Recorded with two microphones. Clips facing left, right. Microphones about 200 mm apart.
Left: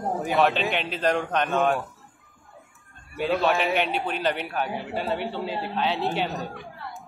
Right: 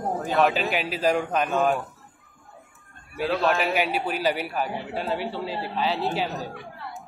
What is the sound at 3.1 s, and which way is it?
A man's voice, centre (ahead or behind).